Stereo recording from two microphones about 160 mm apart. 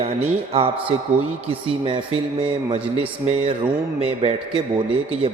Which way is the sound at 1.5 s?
35° right (ahead or behind).